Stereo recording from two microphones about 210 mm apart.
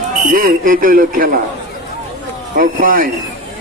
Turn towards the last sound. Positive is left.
turn(degrees=-40)  # may be behind; listen again after turning